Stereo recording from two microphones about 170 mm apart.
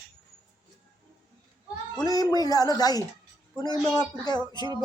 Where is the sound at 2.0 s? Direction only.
25° left (ahead or behind).